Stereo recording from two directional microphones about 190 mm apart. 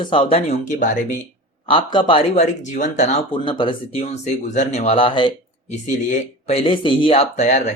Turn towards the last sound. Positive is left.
turn(degrees=40)  # may be behind; listen again after turning